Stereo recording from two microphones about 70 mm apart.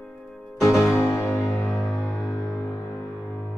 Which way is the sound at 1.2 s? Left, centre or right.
Left.